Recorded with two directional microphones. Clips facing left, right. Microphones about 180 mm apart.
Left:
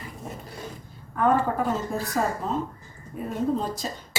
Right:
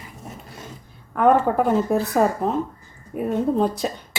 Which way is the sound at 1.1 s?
65° right (ahead or behind).